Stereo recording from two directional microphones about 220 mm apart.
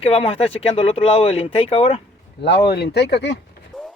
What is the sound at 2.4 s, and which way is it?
Speech, 50° left (ahead or behind).